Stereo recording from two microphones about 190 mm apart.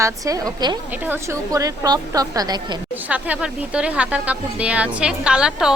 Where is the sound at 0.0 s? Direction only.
20° right (ahead or behind).